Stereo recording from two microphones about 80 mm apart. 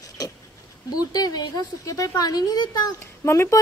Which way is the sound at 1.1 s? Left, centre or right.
Left.